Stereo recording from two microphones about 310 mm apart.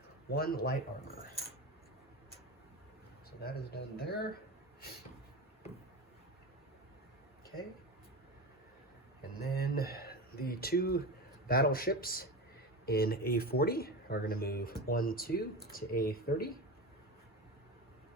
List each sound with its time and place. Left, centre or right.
0.3 s speech: left
3.4 s speech: left
9.4 s speech: left